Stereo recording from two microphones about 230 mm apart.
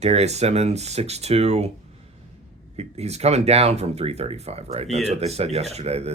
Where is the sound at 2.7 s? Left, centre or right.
Right.